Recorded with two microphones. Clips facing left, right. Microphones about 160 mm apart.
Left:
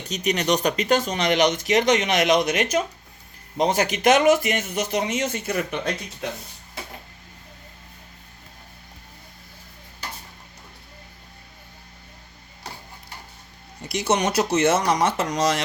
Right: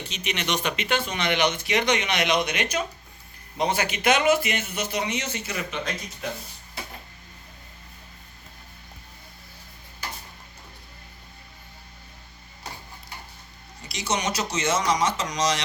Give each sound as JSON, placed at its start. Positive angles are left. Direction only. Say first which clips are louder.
{"t": 0.1, "sound": "speech", "louder": "left 8 dB", "side_deg": 40}
{"t": 13.8, "sound": "speech", "louder": "left 6 dB", "side_deg": 60}